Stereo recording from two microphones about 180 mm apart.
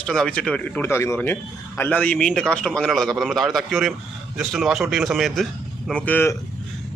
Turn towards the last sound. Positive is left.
turn(degrees=10)  # may be behind; listen again after turning